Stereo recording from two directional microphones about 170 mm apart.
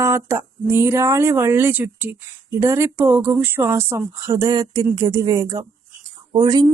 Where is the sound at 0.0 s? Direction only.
15° right (ahead or behind).